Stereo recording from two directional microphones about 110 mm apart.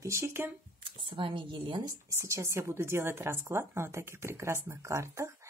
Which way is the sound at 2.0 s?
30° right (ahead or behind).